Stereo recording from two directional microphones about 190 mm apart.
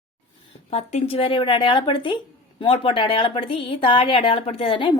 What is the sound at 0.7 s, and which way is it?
A woman's voice, 35° left (ahead or behind).